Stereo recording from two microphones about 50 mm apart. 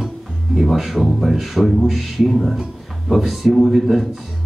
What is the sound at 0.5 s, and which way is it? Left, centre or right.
Music, centre.